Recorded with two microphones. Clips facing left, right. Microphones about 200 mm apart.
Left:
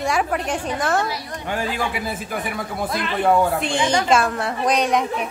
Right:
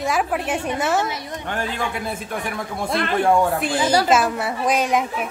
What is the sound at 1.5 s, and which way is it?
A woman's voice, 5° left (ahead or behind).